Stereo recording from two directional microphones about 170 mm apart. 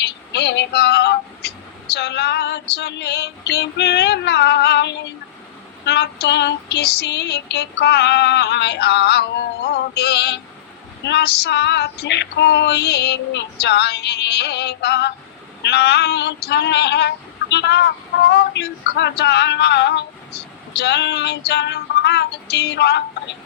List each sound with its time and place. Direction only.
0.0 s vehicle: 80° left
5.8 s female singing: 75° left (ahead or behind)
15.6 s a sound: 75° left (ahead or behind)